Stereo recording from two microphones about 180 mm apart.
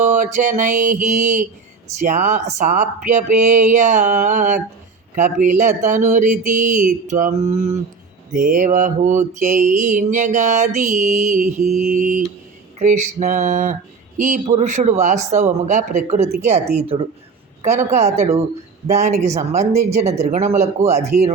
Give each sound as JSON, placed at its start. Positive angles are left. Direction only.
{"t": 0.0, "sound": "mantra", "side_deg": -40}
{"t": 14.2, "sound": "a man's voice", "side_deg": -45}